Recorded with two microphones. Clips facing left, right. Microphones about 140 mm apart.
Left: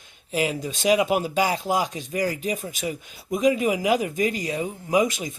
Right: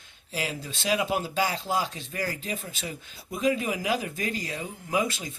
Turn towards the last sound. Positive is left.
turn(degrees=15)  # may be behind; listen again after turning